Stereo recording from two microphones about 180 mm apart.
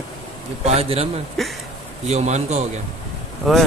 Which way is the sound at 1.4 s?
Centre (ahead or behind).